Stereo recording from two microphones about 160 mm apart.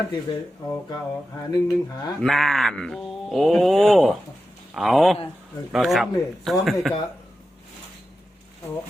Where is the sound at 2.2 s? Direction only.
Centre (ahead or behind).